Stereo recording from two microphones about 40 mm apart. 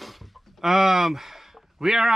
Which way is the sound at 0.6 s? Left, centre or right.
Centre.